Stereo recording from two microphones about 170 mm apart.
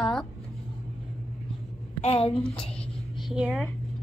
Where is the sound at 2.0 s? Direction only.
35° left (ahead or behind).